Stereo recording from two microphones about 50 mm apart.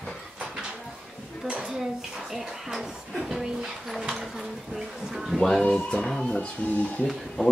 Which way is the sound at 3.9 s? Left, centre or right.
Centre.